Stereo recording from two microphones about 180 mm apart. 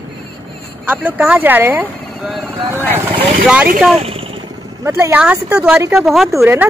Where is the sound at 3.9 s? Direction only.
30° right (ahead or behind).